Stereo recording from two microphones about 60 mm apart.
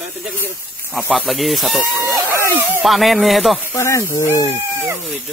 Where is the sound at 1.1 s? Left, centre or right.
Centre.